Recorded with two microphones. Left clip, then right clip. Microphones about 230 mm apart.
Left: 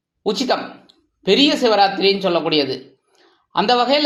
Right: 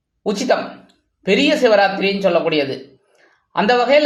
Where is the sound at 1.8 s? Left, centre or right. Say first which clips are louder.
Left 1 dB; centre.